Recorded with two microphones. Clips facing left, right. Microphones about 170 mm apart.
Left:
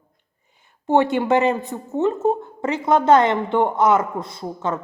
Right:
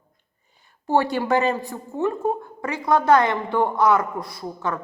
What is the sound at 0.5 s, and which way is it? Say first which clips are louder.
A woman's voice: left 3 dB; 20° left (ahead or behind).